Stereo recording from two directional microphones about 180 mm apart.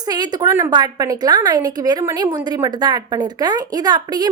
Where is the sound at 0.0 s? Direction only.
20° right (ahead or behind).